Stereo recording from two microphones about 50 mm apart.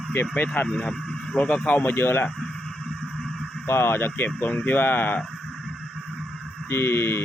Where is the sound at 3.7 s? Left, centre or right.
Left.